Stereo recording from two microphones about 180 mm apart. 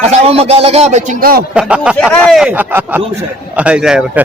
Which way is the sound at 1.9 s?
5° left (ahead or behind).